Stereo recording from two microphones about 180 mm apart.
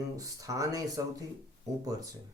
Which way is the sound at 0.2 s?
20° right (ahead or behind).